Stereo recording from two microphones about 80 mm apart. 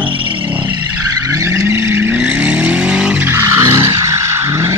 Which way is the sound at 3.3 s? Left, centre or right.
Right.